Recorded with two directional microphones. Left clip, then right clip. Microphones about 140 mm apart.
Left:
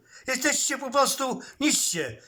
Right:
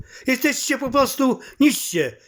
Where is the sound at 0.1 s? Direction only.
15° right (ahead or behind).